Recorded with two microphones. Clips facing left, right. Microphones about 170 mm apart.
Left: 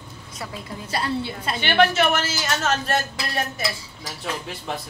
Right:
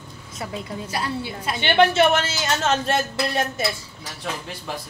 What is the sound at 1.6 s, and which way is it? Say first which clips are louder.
A man's voice: right 2 dB; 25° right (ahead or behind).